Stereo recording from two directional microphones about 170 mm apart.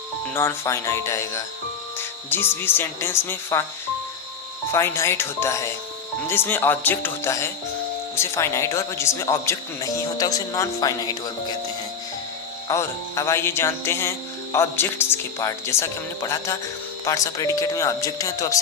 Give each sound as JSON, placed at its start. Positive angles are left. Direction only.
{"t": 0.3, "sound": "music", "side_deg": 15}
{"t": 4.7, "sound": "music", "side_deg": 15}
{"t": 12.6, "sound": "music", "side_deg": 20}
{"t": 17.1, "sound": "speech", "side_deg": 20}